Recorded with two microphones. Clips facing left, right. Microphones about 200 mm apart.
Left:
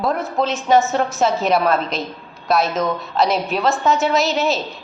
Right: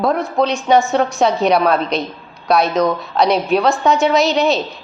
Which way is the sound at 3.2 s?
Centre (ahead or behind).